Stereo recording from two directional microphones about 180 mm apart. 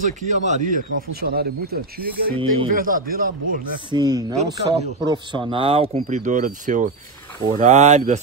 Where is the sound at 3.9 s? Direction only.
25° right (ahead or behind).